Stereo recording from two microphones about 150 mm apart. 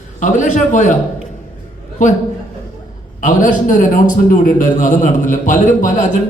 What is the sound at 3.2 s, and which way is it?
A man's voice, 60° left (ahead or behind).